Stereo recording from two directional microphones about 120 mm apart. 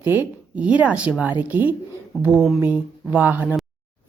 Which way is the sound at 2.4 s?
Centre (ahead or behind).